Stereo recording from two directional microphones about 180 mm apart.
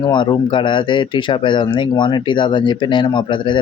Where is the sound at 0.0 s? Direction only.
25° left (ahead or behind).